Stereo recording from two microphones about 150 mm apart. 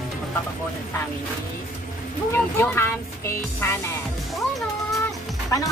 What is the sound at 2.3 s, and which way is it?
Speech, 15° left (ahead or behind).